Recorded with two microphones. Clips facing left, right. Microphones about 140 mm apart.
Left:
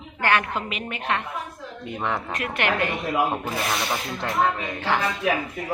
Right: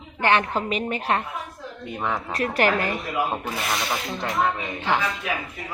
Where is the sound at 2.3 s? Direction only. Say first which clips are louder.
Right 4 dB; 35° right (ahead or behind).